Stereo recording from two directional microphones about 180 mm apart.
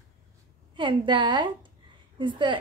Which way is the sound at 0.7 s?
25° right (ahead or behind).